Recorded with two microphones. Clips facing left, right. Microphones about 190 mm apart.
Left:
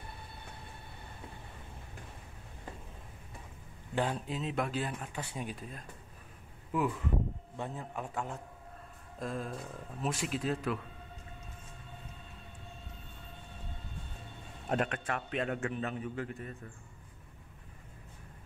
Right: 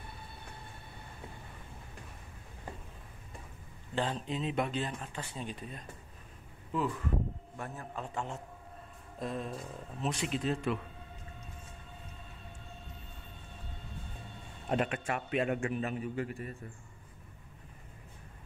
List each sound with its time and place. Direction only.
3.9 s speech: 10° left (ahead or behind)
8.1 s speech: 5° left (ahead or behind)
14.7 s a man's voice: 5° right (ahead or behind)